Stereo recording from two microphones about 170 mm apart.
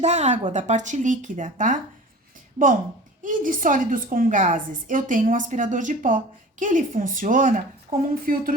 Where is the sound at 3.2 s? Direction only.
55° right (ahead or behind).